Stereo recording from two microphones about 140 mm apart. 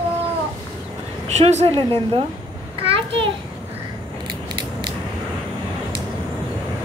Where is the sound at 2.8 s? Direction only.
40° right (ahead or behind).